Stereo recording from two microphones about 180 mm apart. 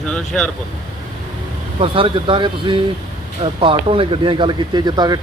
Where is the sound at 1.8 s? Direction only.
30° right (ahead or behind).